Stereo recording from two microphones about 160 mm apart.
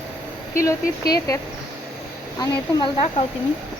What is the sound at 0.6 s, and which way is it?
Speech, 20° left (ahead or behind).